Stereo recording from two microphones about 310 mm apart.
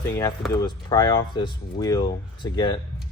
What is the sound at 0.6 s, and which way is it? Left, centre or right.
Speech, centre.